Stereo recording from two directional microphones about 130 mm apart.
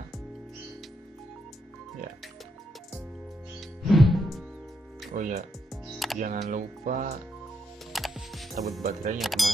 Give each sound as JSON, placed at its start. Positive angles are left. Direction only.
{"t": 3.8, "sound": "music", "side_deg": 0}
{"t": 5.1, "sound": "music", "side_deg": -80}
{"t": 5.7, "sound": "music", "side_deg": 0}
{"t": 6.1, "sound": "speech", "side_deg": -90}
{"t": 6.5, "sound": "music", "side_deg": -85}
{"t": 7.9, "sound": "music", "side_deg": 0}
{"t": 8.8, "sound": "speech", "side_deg": -90}
{"t": 9.2, "sound": "speech", "side_deg": 0}